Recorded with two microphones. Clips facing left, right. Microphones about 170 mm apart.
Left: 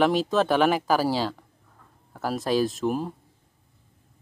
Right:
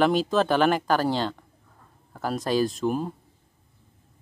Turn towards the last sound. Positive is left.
turn(degrees=0)  # may be behind; listen again after turning